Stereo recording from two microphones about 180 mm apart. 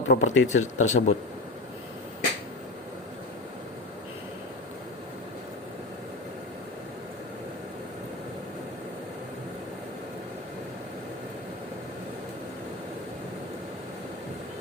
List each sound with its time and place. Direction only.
0.1 s speech: 40° left (ahead or behind)